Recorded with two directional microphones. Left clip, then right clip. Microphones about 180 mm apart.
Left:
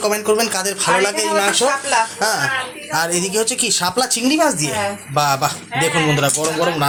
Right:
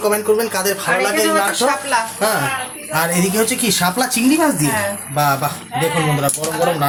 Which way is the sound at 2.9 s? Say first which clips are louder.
Right 1 dB; 5° left (ahead or behind).